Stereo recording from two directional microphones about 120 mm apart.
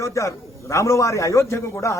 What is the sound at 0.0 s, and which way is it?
A man's voice, 25° left (ahead or behind).